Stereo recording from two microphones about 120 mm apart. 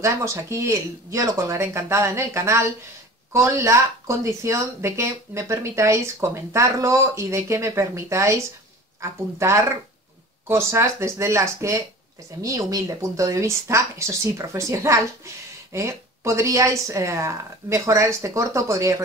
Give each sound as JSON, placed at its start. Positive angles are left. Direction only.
{"t": 0.0, "sound": "speech", "side_deg": -25}
{"t": 10.5, "sound": "speech", "side_deg": -25}